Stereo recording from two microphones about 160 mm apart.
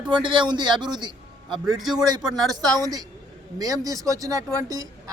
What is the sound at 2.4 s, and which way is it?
Speech, 25° right (ahead or behind).